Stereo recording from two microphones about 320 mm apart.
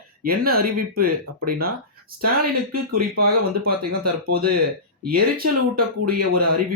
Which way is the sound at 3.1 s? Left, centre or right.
Right.